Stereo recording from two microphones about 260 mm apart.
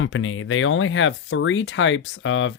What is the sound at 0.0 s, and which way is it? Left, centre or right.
Speech, left.